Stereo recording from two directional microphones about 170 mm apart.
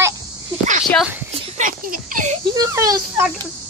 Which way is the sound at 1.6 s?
50° right (ahead or behind).